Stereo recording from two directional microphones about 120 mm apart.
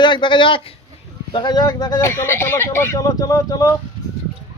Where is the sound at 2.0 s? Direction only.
20° left (ahead or behind).